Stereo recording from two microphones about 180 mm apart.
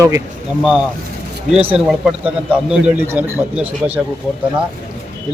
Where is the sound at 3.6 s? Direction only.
10° right (ahead or behind).